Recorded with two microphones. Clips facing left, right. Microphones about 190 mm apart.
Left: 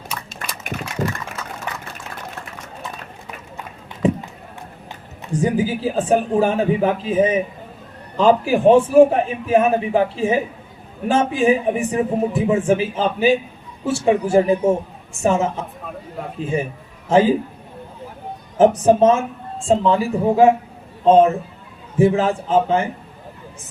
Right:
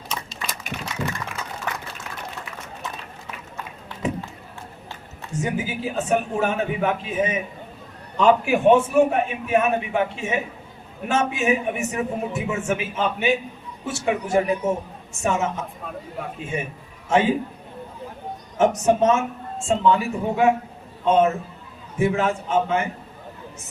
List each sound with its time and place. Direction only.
0.7 s a sound: 40° left (ahead or behind)
5.3 s a man's voice: 35° left (ahead or behind)
18.5 s a man's voice: 30° left (ahead or behind)